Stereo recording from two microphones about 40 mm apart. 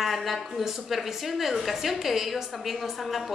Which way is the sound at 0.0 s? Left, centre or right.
Centre.